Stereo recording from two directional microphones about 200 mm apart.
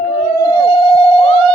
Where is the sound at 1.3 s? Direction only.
90° right.